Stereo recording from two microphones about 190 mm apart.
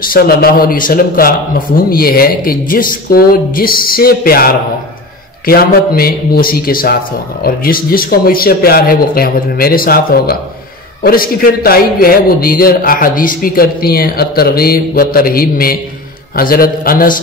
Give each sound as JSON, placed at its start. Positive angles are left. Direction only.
{"t": 0.1, "sound": "a man's voice", "side_deg": 50}